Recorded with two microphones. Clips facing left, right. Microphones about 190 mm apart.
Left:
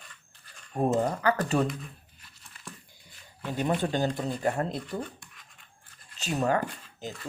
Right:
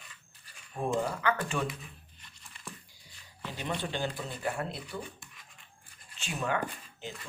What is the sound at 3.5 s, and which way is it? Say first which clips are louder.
Speech: left 8 dB; 45° left (ahead or behind).